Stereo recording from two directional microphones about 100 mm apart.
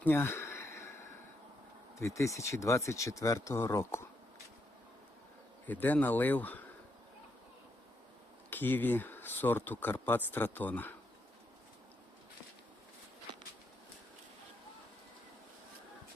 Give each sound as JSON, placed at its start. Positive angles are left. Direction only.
{"t": 0.0, "sound": "a sound", "side_deg": 20}
{"t": 2.0, "sound": "speech", "side_deg": 30}
{"t": 5.6, "sound": "speech", "side_deg": 15}
{"t": 8.4, "sound": "speech", "side_deg": 20}